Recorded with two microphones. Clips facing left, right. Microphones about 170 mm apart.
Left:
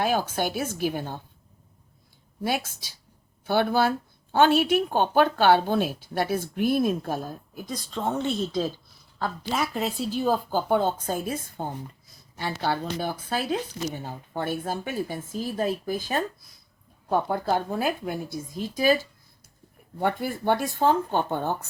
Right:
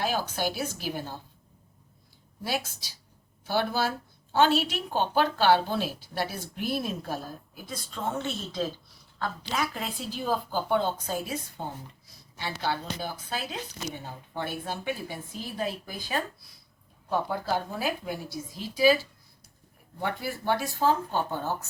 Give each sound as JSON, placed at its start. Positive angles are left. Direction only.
{"t": 0.0, "sound": "speech", "side_deg": 50}
{"t": 2.4, "sound": "speech", "side_deg": 50}
{"t": 9.1, "sound": "speech", "side_deg": 40}
{"t": 20.0, "sound": "speech", "side_deg": 50}